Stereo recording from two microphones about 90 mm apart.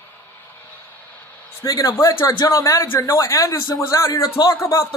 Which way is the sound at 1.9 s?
30° left (ahead or behind).